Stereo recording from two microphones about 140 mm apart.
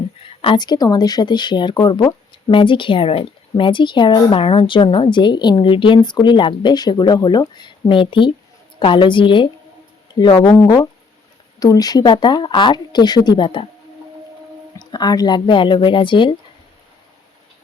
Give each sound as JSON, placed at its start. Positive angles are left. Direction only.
{"t": 0.4, "sound": "speech", "side_deg": 30}
{"t": 11.6, "sound": "speech", "side_deg": 25}
{"t": 14.9, "sound": "speech", "side_deg": 30}